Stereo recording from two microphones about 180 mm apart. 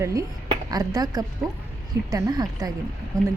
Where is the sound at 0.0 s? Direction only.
20° right (ahead or behind).